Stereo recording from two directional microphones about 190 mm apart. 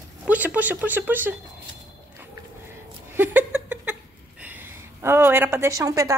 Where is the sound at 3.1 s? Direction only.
10° right (ahead or behind).